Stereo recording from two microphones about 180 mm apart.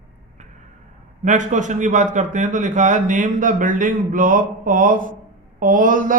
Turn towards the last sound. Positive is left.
turn(degrees=-50)  # may be behind; listen again after turning